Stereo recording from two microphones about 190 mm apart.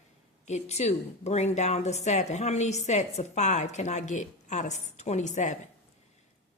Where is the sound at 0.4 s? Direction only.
35° left (ahead or behind).